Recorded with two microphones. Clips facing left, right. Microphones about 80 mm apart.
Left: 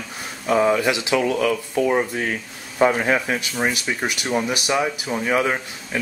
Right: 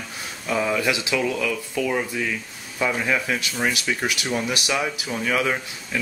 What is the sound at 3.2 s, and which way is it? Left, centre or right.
Speech, left.